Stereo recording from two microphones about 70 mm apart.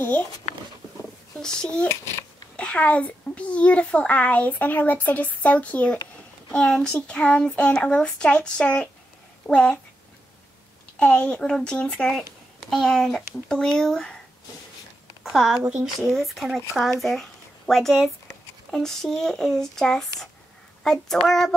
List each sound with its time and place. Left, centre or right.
1.4 s a child's voice: centre
11.0 s a child's voice: centre
15.2 s speech: centre